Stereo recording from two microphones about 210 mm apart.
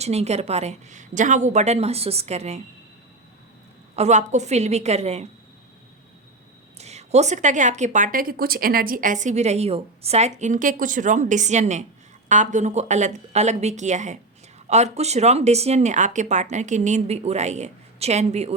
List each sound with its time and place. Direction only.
0.0 s a woman's voice: 30° right (ahead or behind)
3.9 s a woman's voice: 35° right (ahead or behind)
6.7 s a woman's voice: 30° right (ahead or behind)